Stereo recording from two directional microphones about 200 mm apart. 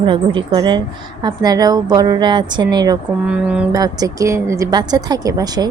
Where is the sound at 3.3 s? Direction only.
5° right (ahead or behind).